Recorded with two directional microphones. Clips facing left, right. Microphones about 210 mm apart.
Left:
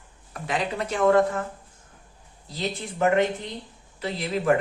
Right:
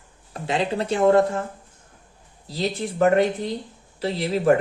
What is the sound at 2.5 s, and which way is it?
Speech, 35° right (ahead or behind).